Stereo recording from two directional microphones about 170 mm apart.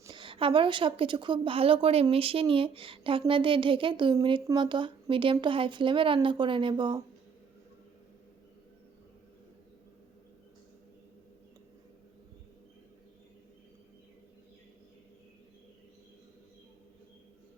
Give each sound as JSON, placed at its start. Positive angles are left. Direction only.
{"t": 0.0, "sound": "a woman's voice", "side_deg": -30}